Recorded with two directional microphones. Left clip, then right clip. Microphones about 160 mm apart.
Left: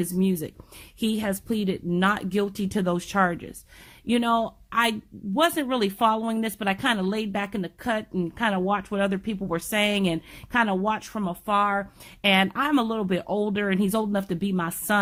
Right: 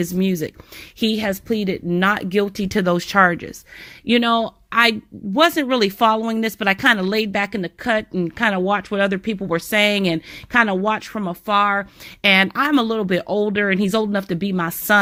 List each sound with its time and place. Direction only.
0.0 s speech: 35° right (ahead or behind)